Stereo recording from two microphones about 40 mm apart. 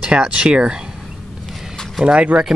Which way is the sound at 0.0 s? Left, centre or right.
Right.